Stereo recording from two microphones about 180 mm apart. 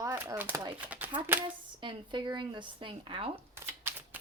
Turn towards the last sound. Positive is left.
turn(degrees=-15)  # may be behind; listen again after turning